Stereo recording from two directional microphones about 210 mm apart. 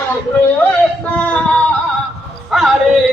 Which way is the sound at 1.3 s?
5° left (ahead or behind).